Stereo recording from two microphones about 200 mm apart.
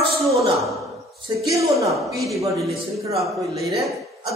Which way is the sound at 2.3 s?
15° right (ahead or behind).